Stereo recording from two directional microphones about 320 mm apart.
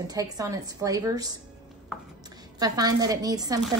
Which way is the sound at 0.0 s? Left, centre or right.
Centre.